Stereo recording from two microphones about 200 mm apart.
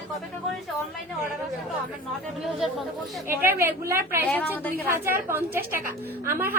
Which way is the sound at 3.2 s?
10° right (ahead or behind).